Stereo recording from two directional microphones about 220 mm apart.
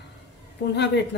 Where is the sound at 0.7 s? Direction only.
50° left (ahead or behind).